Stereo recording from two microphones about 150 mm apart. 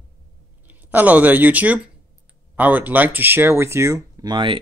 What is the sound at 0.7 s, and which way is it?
Speech, 10° right (ahead or behind).